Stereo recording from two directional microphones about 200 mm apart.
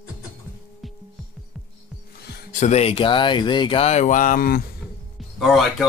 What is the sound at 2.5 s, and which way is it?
Speech, 35° left (ahead or behind).